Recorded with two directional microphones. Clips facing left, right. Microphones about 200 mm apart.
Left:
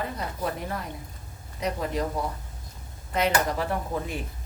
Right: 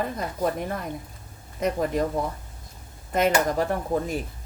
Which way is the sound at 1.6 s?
50° right (ahead or behind).